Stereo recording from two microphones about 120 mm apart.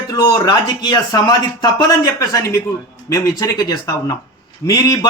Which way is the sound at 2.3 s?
25° left (ahead or behind).